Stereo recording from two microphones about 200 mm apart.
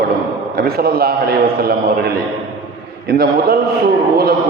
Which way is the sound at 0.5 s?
50° right (ahead or behind).